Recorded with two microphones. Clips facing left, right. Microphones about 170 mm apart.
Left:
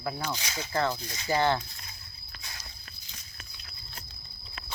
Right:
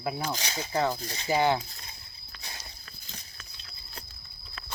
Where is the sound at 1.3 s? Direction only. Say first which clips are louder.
Right 1 dB; 15° right (ahead or behind).